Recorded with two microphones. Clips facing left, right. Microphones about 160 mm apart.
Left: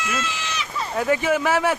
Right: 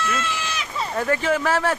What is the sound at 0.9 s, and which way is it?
Speech, 10° left (ahead or behind).